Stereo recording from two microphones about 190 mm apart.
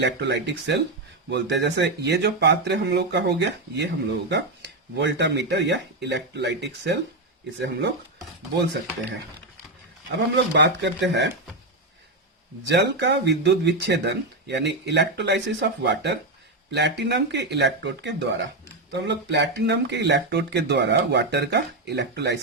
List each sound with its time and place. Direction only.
0.0 s speech: 65° right (ahead or behind)
10.2 s speech: 65° right (ahead or behind)
12.6 s speech: 65° right (ahead or behind)